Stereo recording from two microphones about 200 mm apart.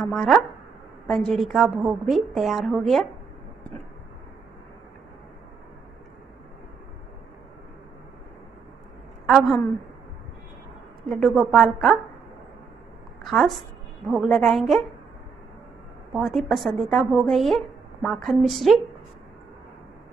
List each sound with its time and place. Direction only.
0.0 s a woman's voice: centre (ahead or behind)
9.3 s a woman's voice: centre (ahead or behind)
11.1 s a woman's voice: centre (ahead or behind)
13.2 s a sound: centre (ahead or behind)
14.2 s a woman's voice: centre (ahead or behind)
16.1 s a woman's voice: centre (ahead or behind)